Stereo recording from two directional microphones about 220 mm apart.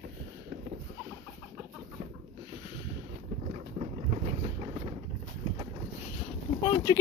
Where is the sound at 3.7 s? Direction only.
25° right (ahead or behind).